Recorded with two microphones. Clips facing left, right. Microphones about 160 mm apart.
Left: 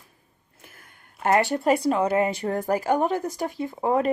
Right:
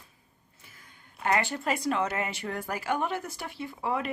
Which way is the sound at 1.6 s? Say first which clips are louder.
Left 7 dB; 35° left (ahead or behind).